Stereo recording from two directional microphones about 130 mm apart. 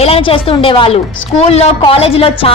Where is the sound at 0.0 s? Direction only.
45° left (ahead or behind).